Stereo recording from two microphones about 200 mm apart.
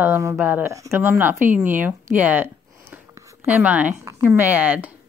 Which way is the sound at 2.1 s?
10° right (ahead or behind).